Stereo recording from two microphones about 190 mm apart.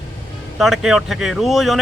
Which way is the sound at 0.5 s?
Centre (ahead or behind).